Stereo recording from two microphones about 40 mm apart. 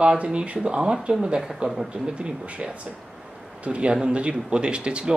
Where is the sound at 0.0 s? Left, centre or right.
Right.